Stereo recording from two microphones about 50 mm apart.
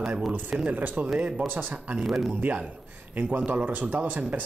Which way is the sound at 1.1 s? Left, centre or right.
Right.